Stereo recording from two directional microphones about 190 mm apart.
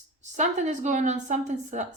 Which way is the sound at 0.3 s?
40° right (ahead or behind).